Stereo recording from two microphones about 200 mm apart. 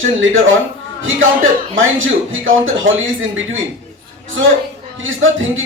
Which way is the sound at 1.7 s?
75° right (ahead or behind).